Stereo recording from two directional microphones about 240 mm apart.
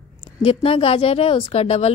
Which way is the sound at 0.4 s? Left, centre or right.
Left.